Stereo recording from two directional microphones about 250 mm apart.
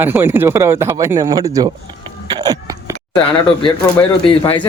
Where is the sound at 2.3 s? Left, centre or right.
Centre.